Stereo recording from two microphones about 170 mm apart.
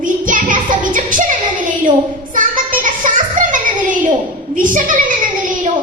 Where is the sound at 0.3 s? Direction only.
50° right (ahead or behind).